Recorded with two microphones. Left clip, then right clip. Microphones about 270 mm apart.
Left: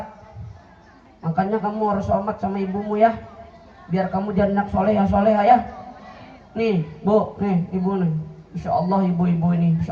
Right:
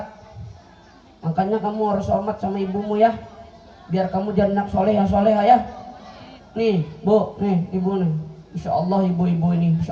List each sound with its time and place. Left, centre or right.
1.2 s a man's voice: right
6.6 s a man's voice: right